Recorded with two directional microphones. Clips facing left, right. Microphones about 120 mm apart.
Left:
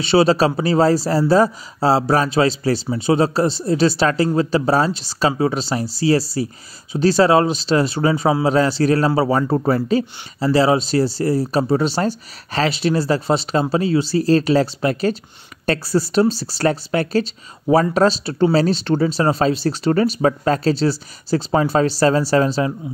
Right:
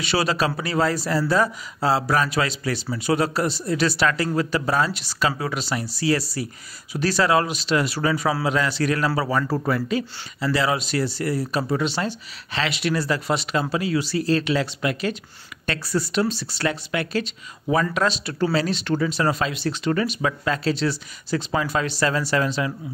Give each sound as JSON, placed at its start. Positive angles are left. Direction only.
{"t": 0.0, "sound": "speech", "side_deg": 30}